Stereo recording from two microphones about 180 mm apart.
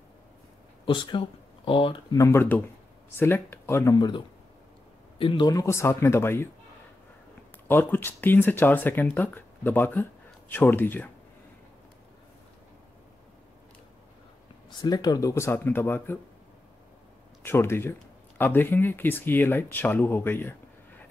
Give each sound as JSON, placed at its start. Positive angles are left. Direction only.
{"t": 0.8, "sound": "speech", "side_deg": 25}
{"t": 2.2, "sound": "speech", "side_deg": 10}
{"t": 5.2, "sound": "speech", "side_deg": 25}
{"t": 7.6, "sound": "speech", "side_deg": 10}
{"t": 14.7, "sound": "speech", "side_deg": 20}
{"t": 17.4, "sound": "speech", "side_deg": 15}